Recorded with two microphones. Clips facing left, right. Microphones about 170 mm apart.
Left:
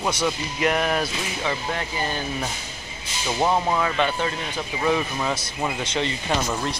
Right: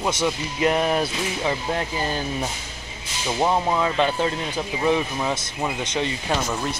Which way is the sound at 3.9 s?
30° right (ahead or behind).